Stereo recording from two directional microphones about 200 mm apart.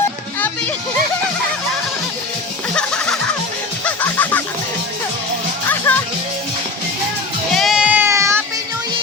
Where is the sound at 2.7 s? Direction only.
5° left (ahead or behind).